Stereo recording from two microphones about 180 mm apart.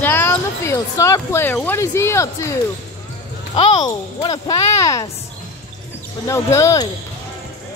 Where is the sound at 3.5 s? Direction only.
30° left (ahead or behind).